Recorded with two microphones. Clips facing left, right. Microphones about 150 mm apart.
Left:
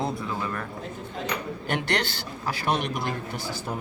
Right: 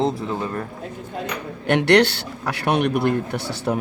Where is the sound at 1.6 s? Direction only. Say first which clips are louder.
Right 13 dB; 70° right (ahead or behind).